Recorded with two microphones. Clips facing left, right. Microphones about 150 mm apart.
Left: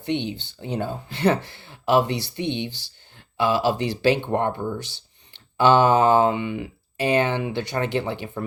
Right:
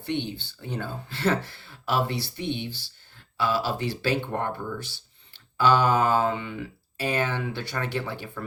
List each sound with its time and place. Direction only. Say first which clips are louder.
0.0 s speech: left 4 dB; 15° left (ahead or behind)